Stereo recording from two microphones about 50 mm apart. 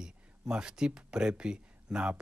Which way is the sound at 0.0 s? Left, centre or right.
Centre.